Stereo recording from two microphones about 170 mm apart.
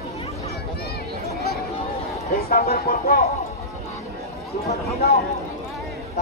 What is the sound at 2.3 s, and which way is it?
Speech, 60° left (ahead or behind).